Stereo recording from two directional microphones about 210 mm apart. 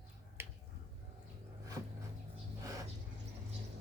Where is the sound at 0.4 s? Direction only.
10° right (ahead or behind).